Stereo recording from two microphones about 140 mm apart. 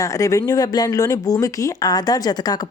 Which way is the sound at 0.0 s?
25° left (ahead or behind).